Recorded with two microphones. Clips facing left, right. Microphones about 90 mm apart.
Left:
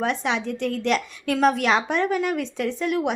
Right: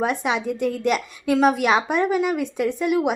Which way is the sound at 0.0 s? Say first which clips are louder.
Right 2 dB; 10° right (ahead or behind).